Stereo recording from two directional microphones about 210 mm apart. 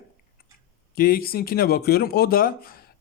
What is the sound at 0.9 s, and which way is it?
Speech, 45° left (ahead or behind).